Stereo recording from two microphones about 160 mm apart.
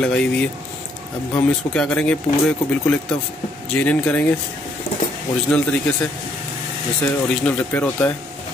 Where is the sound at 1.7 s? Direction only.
5° left (ahead or behind).